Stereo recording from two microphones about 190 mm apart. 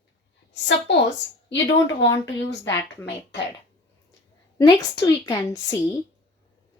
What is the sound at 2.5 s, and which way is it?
Speech, 15° left (ahead or behind).